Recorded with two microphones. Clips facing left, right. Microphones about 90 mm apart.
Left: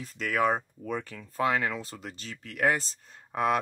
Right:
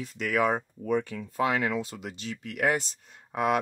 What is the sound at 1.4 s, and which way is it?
Speech, 40° left (ahead or behind).